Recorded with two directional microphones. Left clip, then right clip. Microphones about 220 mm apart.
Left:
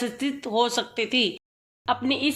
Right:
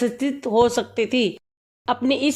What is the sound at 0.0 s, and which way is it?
A woman's voice, 45° right (ahead or behind).